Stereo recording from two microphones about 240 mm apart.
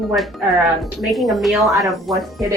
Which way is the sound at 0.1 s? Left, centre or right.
Centre.